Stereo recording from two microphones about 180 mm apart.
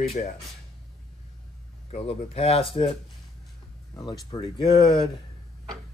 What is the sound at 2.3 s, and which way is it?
Speech, 35° left (ahead or behind).